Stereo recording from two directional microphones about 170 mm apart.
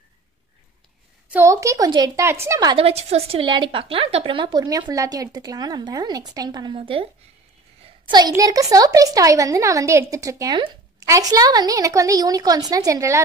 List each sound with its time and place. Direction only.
1.3 s a woman's voice: 15° right (ahead or behind)
2.8 s a woman's voice: 40° right (ahead or behind); by 13.2 s 20° right (ahead or behind)